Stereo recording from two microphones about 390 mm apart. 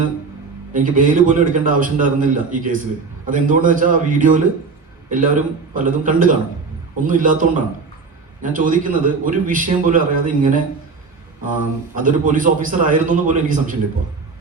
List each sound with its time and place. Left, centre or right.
0.7 s a man's voice: centre